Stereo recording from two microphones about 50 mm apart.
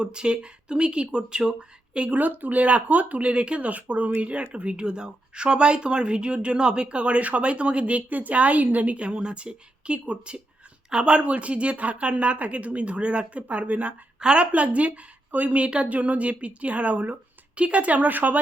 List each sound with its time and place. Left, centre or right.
0.0 s speech: centre
2.0 s speech: right
14.2 s speech: centre